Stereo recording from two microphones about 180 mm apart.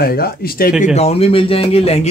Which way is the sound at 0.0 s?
60° left (ahead or behind).